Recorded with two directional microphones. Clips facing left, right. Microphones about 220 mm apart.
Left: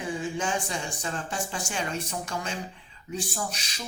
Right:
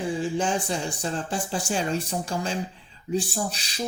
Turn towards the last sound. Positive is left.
turn(degrees=-30)  # may be behind; listen again after turning